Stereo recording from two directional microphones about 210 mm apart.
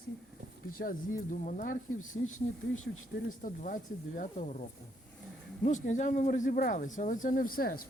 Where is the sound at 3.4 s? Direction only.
40° left (ahead or behind).